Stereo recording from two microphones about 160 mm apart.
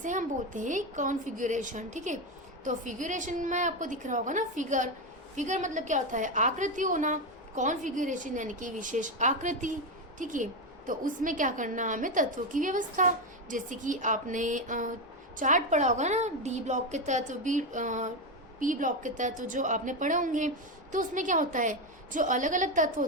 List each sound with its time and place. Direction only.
0.0 s a woman's voice: 50° right (ahead or behind)